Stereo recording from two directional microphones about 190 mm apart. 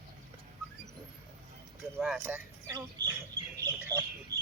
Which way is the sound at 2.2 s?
10° right (ahead or behind).